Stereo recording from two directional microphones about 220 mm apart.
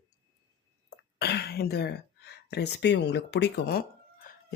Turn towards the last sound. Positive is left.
turn(degrees=45)  # may be behind; listen again after turning